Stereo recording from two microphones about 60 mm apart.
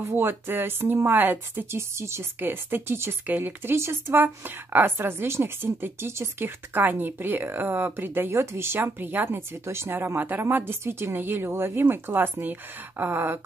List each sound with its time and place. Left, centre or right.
0.0 s speech: right
2.4 s speech: right